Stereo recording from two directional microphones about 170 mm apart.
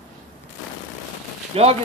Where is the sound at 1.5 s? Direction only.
35° right (ahead or behind).